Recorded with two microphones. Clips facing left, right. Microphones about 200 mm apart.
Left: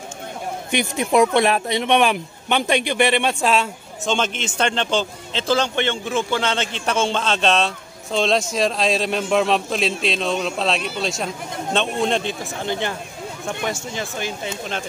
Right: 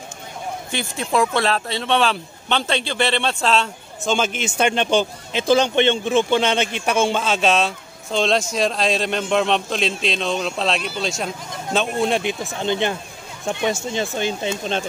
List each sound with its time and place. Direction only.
0.7 s speech: 20° left (ahead or behind)
4.0 s a man's voice: 5° right (ahead or behind); by 14.8 s 25° right (ahead or behind)